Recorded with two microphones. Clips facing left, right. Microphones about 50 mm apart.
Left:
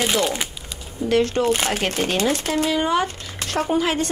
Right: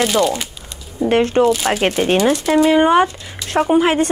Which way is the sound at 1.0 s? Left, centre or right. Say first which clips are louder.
Right 5 dB; right.